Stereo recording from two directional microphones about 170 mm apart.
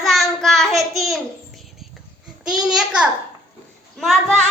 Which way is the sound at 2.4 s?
5° right (ahead or behind).